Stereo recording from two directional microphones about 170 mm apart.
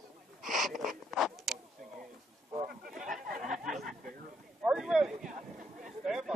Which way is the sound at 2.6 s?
50° right (ahead or behind).